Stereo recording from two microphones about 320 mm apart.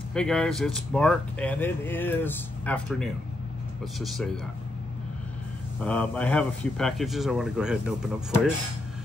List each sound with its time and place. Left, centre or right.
0.1 s speech: centre
5.8 s speech: centre